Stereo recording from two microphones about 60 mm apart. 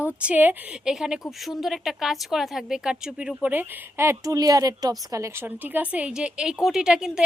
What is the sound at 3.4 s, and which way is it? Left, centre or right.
Speech, right.